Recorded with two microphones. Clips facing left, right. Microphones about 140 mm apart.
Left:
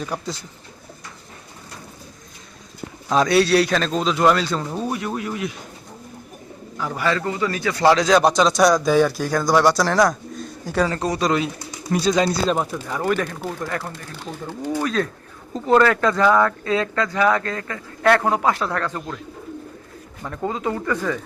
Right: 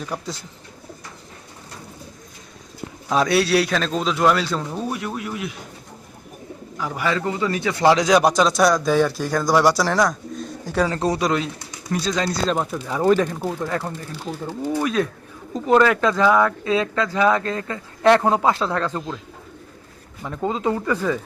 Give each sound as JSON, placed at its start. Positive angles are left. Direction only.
{"t": 0.0, "sound": "a man's voice", "side_deg": 0}
{"t": 3.1, "sound": "a man's voice", "side_deg": -5}
{"t": 6.7, "sound": "a man's voice", "side_deg": -15}
{"t": 11.0, "sound": "speech", "side_deg": -30}
{"t": 11.9, "sound": "speech", "side_deg": 15}
{"t": 12.7, "sound": "a man's voice", "side_deg": -10}
{"t": 20.2, "sound": "a man's voice", "side_deg": -15}